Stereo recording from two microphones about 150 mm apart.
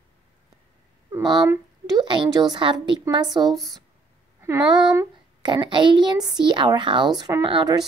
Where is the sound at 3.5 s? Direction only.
Centre (ahead or behind).